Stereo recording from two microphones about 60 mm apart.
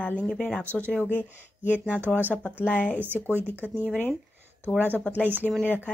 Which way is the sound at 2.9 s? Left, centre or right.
Right.